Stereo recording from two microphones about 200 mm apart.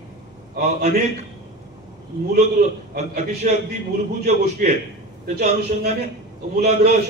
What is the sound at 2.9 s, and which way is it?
Speech, 35° right (ahead or behind).